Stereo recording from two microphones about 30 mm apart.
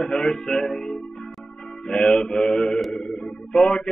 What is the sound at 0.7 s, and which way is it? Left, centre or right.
Music, left.